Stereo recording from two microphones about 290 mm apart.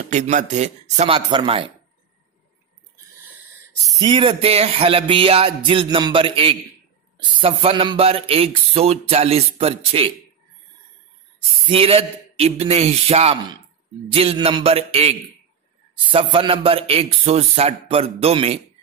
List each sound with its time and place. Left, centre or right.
0.1 s speech: right
4.0 s speech: centre
11.6 s speech: centre